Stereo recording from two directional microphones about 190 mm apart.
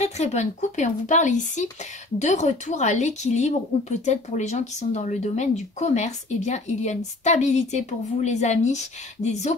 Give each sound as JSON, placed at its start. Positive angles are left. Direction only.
{"t": 0.0, "sound": "speech", "side_deg": 35}